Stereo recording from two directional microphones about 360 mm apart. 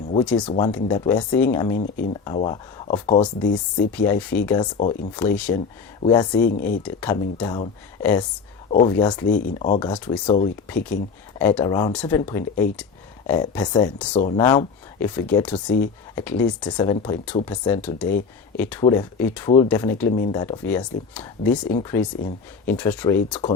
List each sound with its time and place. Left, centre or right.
0.3 s speech: centre
9.9 s speech: centre